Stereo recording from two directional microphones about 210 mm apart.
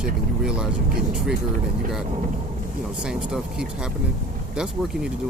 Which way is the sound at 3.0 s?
5° right (ahead or behind).